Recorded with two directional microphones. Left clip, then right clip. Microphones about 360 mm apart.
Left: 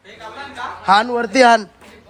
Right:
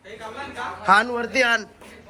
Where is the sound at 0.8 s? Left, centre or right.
Centre.